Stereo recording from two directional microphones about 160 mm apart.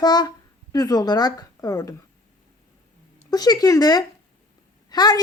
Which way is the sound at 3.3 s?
25° left (ahead or behind).